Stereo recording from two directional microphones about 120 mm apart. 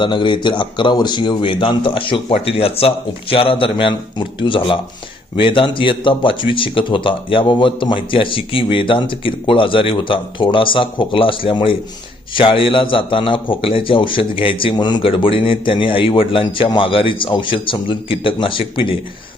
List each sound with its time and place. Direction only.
0.0 s a man's voice: 40° left (ahead or behind)